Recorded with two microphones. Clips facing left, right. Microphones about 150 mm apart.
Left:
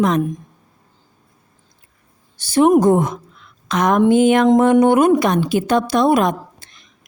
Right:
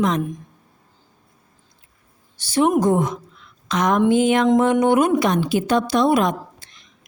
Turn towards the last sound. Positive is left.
turn(degrees=50)  # may be behind; listen again after turning